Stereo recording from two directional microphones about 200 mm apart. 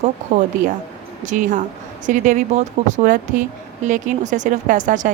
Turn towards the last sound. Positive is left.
turn(degrees=-40)  # may be behind; listen again after turning